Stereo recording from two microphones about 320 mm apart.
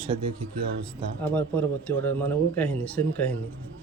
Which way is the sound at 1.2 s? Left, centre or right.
Centre.